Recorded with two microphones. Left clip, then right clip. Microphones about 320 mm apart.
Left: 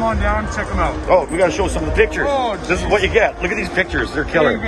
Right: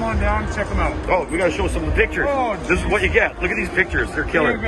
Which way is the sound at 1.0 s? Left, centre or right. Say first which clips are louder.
Left 5 dB; left.